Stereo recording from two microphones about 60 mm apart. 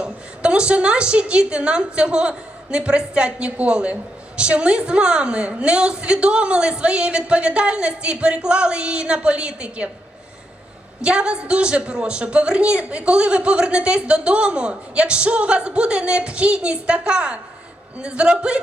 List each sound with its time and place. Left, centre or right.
0.0 s a woman's voice: centre
11.0 s a woman's voice: centre